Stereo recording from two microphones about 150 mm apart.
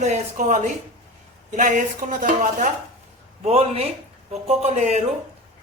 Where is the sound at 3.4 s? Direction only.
45° right (ahead or behind).